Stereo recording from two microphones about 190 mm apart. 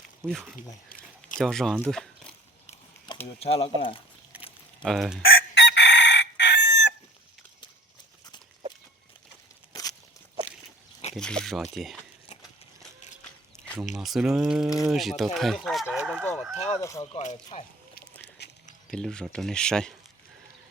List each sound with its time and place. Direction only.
0.3 s speech: centre (ahead or behind)
0.9 s a sound: 45° left (ahead or behind)
1.4 s speech: centre (ahead or behind)
3.2 s speech: 30° left (ahead or behind)
4.3 s a sound: 10° right (ahead or behind)
4.8 s speech: centre (ahead or behind)
5.2 s chicken: 60° left (ahead or behind)
11.1 s speech: 5° left (ahead or behind)
13.6 s a sound: 40° left (ahead or behind)
14.0 s speech: centre (ahead or behind)
16.6 s speech: 35° left (ahead or behind)
18.2 s a sound: 60° left (ahead or behind)
18.9 s speech: 5° left (ahead or behind)